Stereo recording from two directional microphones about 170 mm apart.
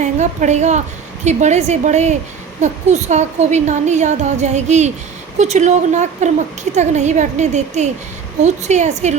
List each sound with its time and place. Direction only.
0.0 s a woman's voice: 45° right (ahead or behind)